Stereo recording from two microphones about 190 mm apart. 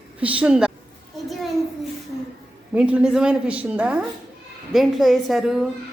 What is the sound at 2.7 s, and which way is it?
A woman's voice, 5° right (ahead or behind).